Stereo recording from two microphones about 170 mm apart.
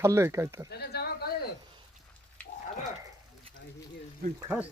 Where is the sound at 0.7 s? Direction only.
70° left (ahead or behind).